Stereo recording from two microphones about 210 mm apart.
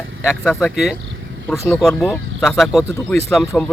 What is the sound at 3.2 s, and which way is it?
Speech, 10° left (ahead or behind).